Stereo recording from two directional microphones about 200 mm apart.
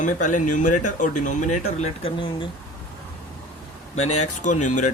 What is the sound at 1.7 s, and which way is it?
Speech, 30° left (ahead or behind).